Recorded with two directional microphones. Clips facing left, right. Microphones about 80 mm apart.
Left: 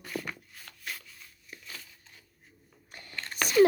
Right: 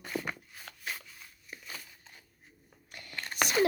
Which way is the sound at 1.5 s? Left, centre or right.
Right.